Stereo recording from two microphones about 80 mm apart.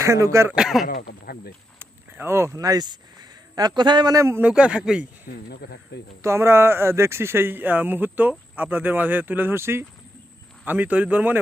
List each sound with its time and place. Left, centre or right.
0.0 s speech: right
0.5 s speech: centre
1.8 s a sound: right
2.6 s speech: right
4.4 s speech: centre
6.2 s speech: right
10.7 s speech: centre